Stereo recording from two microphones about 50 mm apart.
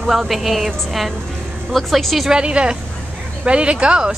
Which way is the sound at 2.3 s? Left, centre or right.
Centre.